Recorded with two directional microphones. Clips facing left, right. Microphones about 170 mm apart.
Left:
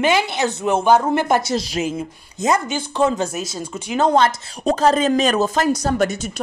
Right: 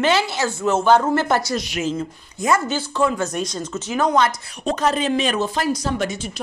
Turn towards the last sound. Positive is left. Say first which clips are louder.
# left 4 dB
turn(degrees=45)  # may be behind; listen again after turning